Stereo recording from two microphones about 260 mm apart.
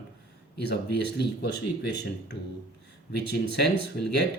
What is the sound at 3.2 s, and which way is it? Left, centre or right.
Speech, left.